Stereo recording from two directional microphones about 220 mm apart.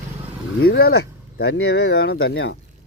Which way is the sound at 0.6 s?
45° left (ahead or behind).